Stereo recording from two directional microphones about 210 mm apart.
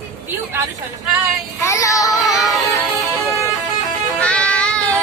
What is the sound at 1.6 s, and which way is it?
Child singing, 15° left (ahead or behind).